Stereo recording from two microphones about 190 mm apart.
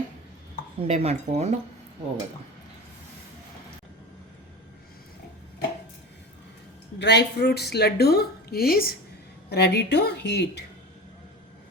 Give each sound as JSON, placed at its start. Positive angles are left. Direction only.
{"t": 0.8, "sound": "speech", "side_deg": -35}
{"t": 7.0, "sound": "a woman's voice", "side_deg": 65}
{"t": 9.5, "sound": "a woman's voice", "side_deg": 60}